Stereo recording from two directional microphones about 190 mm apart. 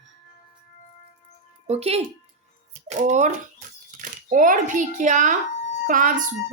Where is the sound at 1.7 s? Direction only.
30° right (ahead or behind).